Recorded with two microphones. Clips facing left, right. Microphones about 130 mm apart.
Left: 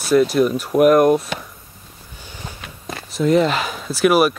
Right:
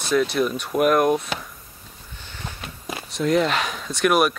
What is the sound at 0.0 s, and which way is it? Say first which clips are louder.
Speech: left 6 dB; 5° left (ahead or behind).